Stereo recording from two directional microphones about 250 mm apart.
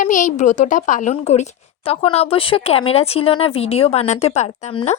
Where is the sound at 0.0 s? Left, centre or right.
Left.